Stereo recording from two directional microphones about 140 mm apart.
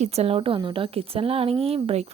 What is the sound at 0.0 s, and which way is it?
Speech, 50° right (ahead or behind).